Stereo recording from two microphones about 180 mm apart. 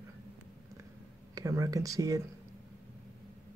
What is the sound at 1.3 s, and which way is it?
Speech, 20° right (ahead or behind).